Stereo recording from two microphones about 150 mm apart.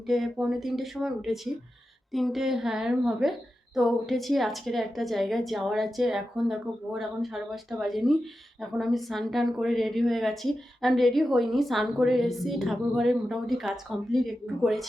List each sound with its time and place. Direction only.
0.1 s speech: centre (ahead or behind)